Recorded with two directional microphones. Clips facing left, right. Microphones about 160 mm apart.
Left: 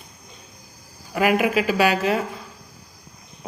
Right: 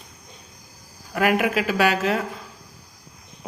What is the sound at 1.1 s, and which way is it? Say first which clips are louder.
Speech: left 1 dB; centre (ahead or behind).